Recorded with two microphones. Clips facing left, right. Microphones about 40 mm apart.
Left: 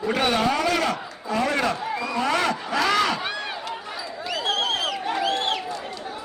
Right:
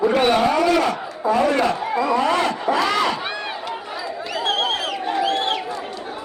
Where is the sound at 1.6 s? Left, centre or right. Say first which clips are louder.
Right 6 dB; right.